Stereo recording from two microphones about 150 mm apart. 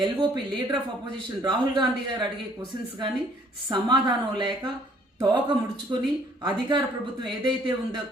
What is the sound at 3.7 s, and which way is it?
A woman's voice, 30° right (ahead or behind).